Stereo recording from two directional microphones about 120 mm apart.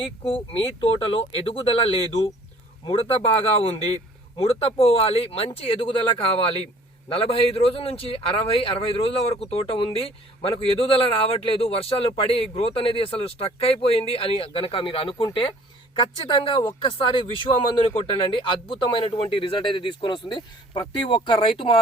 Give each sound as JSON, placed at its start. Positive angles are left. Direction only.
{"t": 0.0, "sound": "a man's voice", "side_deg": 50}
{"t": 18.2, "sound": "a man's voice", "side_deg": 45}